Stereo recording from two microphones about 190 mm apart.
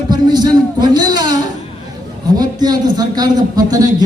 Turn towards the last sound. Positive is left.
turn(degrees=-20)  # may be behind; listen again after turning